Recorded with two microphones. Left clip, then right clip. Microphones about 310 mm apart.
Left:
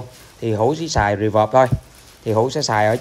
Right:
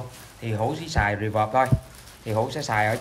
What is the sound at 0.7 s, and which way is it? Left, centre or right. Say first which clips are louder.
Speech: left 6 dB; centre.